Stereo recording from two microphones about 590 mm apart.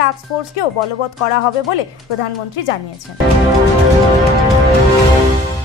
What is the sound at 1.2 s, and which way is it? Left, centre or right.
Speech, left.